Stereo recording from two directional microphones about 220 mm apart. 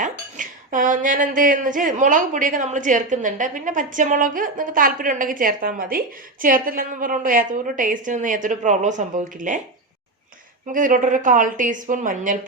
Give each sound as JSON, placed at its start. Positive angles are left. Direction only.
{"t": 0.0, "sound": "speech", "side_deg": -35}
{"t": 10.7, "sound": "speech", "side_deg": -35}